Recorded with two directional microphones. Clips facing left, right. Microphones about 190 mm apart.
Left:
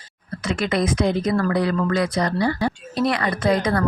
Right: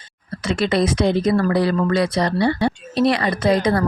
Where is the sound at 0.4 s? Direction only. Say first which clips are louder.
Right 3 dB; 30° right (ahead or behind).